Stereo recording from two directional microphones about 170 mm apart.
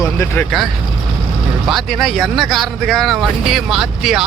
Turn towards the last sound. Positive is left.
turn(degrees=0)  # may be behind; listen again after turning